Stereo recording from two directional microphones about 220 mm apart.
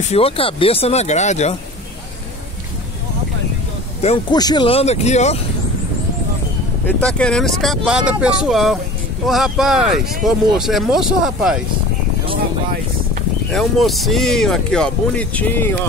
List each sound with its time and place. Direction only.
0.1 s speech: 25° left (ahead or behind)
4.0 s speech: 25° left (ahead or behind)
7.0 s speech: 5° left (ahead or behind)
13.5 s speech: centre (ahead or behind)